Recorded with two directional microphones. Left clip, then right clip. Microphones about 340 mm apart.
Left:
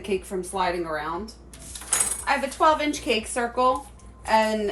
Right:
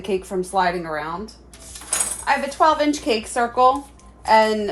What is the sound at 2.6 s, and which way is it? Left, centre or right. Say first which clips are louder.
A woman's voice: right 4 dB; centre.